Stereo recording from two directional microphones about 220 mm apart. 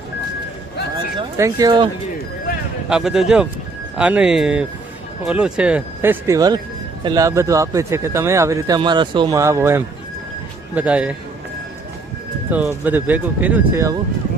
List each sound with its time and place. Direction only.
0.9 s speech: 15° right (ahead or behind)
2.9 s speech: centre (ahead or behind)
12.5 s speech: 5° right (ahead or behind)